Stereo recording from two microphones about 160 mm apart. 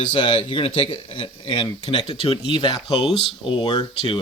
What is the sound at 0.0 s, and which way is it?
Speech, 30° left (ahead or behind).